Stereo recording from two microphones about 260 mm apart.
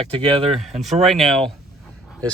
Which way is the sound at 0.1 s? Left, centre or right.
Right.